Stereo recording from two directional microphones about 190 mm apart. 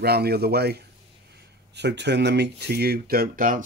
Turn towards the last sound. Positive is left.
turn(degrees=-45)  # may be behind; listen again after turning